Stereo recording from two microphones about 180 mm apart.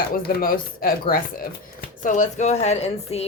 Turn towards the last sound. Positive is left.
turn(degrees=35)  # may be behind; listen again after turning